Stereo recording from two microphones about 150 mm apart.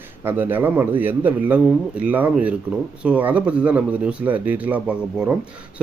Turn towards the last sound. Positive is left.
turn(degrees=-5)  # may be behind; listen again after turning